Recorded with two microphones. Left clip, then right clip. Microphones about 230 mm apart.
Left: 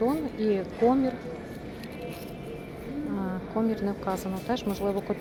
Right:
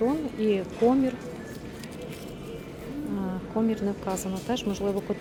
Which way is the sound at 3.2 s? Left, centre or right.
Centre.